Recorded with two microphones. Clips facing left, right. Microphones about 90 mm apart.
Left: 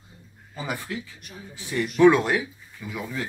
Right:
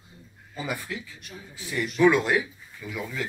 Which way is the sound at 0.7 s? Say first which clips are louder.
Left 2 dB; 25° left (ahead or behind).